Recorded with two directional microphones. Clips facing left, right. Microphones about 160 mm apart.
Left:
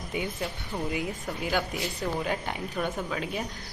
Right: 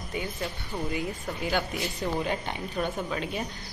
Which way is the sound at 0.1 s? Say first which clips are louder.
Left 1 dB; 15° left (ahead or behind).